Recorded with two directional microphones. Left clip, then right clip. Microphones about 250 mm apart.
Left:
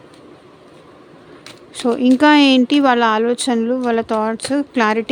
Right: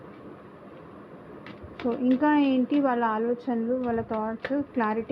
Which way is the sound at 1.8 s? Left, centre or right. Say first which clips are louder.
Left 11 dB; left.